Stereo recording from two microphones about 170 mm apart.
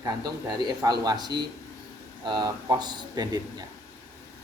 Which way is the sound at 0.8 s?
25° right (ahead or behind).